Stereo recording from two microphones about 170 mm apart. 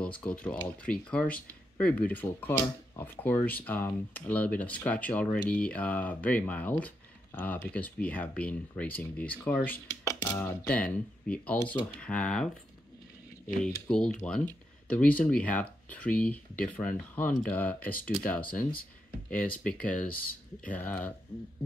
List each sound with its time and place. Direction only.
0.0 s speech: 10° left (ahead or behind)
10.7 s speech: 10° left (ahead or behind)
13.6 s speech: 5° left (ahead or behind)